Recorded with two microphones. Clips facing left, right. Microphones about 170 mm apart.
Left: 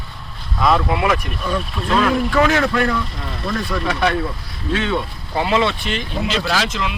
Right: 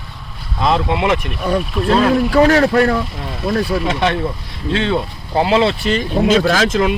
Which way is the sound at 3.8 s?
25° right (ahead or behind).